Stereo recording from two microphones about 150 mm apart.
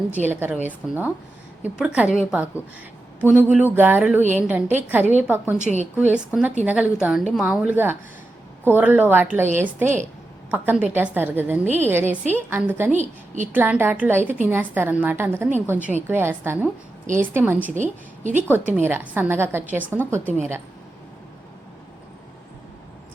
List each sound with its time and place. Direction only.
0.1 s a woman's voice: 10° right (ahead or behind)
5.7 s a woman's voice: centre (ahead or behind)
12.9 s a woman's voice: 55° right (ahead or behind)
13.5 s a woman's voice: 15° right (ahead or behind)
17.7 s a woman's voice: 55° right (ahead or behind)
18.3 s a woman's voice: 15° right (ahead or behind)